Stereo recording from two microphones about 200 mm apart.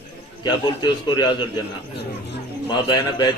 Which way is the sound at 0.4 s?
20° left (ahead or behind).